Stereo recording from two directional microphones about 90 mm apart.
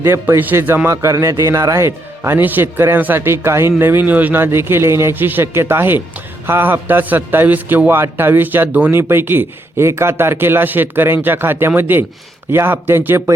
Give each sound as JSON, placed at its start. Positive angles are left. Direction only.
{"t": 0.0, "sound": "a man's voice", "side_deg": -25}